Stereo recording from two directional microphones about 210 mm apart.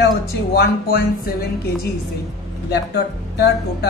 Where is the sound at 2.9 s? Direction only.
50° left (ahead or behind).